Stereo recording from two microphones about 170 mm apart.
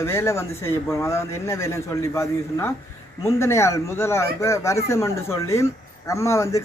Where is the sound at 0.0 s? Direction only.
15° left (ahead or behind).